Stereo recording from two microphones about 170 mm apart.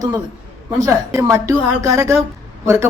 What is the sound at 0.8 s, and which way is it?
A woman's voice, 15° right (ahead or behind).